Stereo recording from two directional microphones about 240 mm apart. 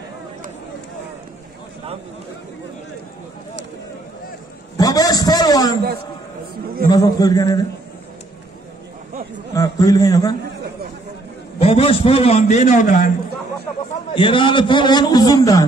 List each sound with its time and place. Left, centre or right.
4.7 s a sound: centre
6.9 s a man's voice: centre
9.6 s a man's voice: centre
11.6 s a man's voice: left
14.1 s a man's voice: left